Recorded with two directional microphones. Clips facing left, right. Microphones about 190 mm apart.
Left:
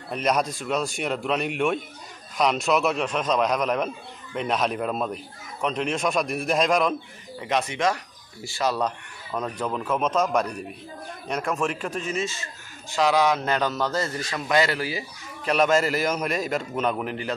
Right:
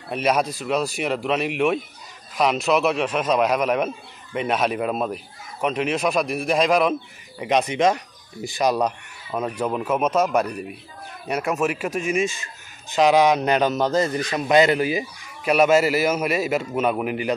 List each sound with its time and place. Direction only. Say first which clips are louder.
0.1 s a man's voice: right 3 dB; 5° right (ahead or behind)
7.3 s a man's voice: right 5 dB; 20° right (ahead or behind)